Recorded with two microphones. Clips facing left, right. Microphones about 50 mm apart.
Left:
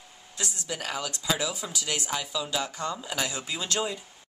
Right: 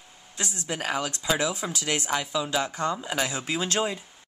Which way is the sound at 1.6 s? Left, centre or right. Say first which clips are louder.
Right 4 dB; right.